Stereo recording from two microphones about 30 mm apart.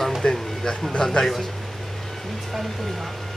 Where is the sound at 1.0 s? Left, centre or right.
Left.